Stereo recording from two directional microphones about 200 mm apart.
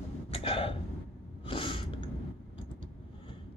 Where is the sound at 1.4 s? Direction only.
25° left (ahead or behind).